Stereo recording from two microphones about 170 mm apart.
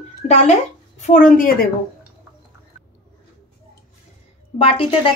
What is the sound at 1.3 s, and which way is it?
Speech, 55° left (ahead or behind).